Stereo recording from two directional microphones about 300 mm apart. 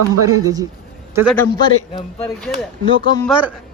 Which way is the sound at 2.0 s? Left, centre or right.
Centre.